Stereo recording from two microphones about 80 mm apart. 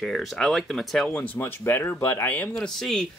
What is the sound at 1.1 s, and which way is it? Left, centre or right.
Speech, centre.